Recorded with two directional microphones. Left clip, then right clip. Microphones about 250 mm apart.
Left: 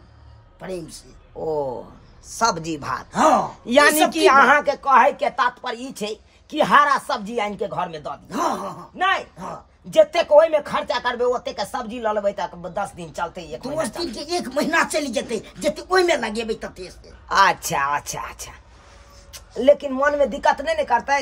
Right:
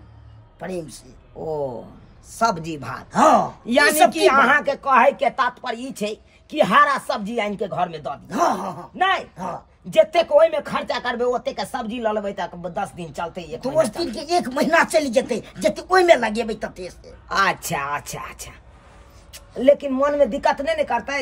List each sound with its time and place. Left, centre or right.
0.6 s a man's voice: centre
2.3 s a woman's voice: centre
3.1 s speech: centre
3.6 s a woman's voice: centre
13.9 s speech: centre
17.3 s a woman's voice: centre